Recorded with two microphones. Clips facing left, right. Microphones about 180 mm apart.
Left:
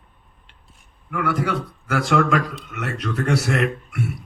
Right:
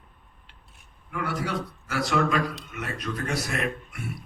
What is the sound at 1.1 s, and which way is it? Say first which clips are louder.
Speech: left 6 dB; 60° left (ahead or behind).